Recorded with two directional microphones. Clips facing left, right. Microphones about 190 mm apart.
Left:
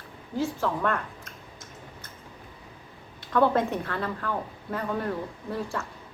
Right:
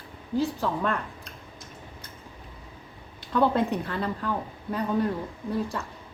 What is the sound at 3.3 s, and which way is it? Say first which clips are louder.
Speech: even; 15° right (ahead or behind).